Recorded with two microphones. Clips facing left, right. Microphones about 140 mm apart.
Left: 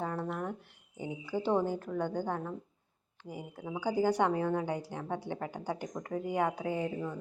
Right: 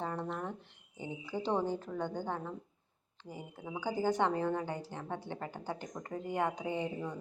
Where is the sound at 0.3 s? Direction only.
5° left (ahead or behind).